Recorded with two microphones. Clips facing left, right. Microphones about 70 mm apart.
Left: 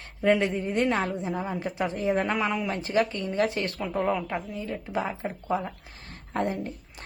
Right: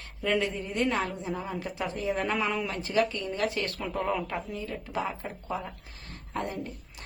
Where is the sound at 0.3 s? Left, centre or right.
Left.